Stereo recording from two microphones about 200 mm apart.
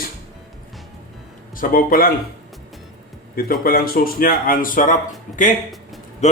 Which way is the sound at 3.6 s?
45° left (ahead or behind).